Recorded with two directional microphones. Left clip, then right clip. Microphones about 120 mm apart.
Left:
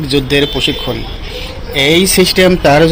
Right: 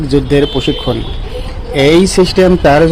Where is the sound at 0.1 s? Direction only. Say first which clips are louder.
Right 1 dB; 45° right (ahead or behind).